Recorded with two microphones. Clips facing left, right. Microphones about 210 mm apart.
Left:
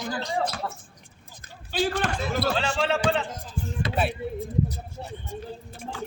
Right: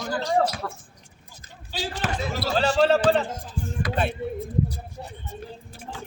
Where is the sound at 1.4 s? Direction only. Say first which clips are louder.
Left 6 dB; 55° left (ahead or behind).